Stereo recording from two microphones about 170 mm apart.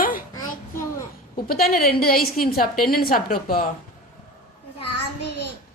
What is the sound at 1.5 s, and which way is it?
A woman's voice, 60° left (ahead or behind).